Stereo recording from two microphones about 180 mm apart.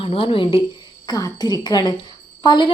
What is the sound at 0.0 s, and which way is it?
A woman's voice, 30° left (ahead or behind).